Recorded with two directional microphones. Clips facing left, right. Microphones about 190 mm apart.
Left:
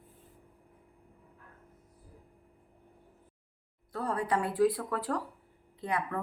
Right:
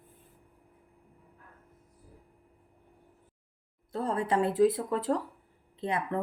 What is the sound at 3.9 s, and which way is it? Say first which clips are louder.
Speech: right 2 dB; 25° right (ahead or behind).